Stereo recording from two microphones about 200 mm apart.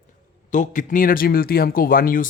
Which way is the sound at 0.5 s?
40° left (ahead or behind).